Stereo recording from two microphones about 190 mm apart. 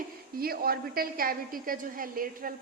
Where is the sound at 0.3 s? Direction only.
50° right (ahead or behind).